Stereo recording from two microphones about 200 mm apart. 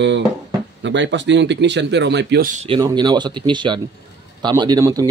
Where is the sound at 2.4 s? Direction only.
35° right (ahead or behind).